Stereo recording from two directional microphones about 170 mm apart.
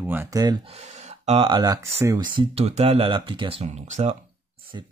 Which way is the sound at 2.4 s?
35° right (ahead or behind).